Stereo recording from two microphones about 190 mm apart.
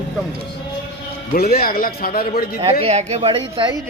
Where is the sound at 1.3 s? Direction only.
55° left (ahead or behind).